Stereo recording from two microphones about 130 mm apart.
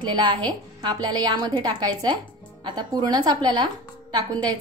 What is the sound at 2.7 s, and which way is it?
A woman's voice, 35° right (ahead or behind).